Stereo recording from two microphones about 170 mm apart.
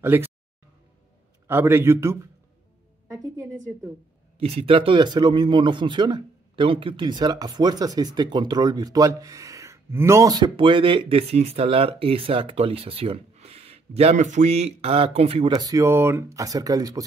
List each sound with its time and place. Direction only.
0.0 s a man's voice: 15° right (ahead or behind)
1.5 s a man's voice: 15° right (ahead or behind)
4.4 s speech: 35° right (ahead or behind)
15.5 s speech: 20° right (ahead or behind)